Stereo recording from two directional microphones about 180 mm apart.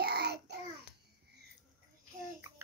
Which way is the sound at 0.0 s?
65° right (ahead or behind).